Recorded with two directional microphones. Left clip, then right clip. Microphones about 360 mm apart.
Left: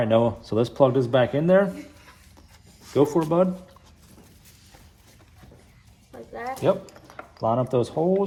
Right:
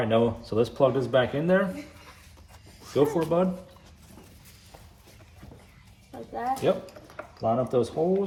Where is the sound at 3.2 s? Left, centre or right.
Centre.